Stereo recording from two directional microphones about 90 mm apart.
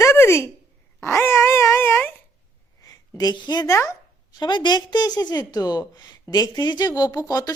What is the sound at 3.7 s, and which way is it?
Speech, 35° left (ahead or behind).